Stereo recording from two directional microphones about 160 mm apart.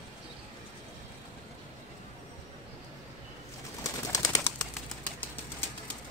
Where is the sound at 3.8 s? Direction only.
20° left (ahead or behind).